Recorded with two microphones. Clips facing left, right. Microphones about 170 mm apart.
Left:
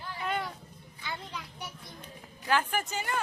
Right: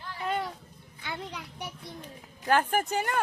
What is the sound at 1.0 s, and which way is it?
Speech, 60° right (ahead or behind).